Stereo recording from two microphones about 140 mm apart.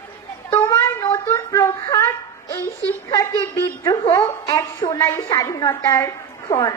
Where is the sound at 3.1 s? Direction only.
25° left (ahead or behind).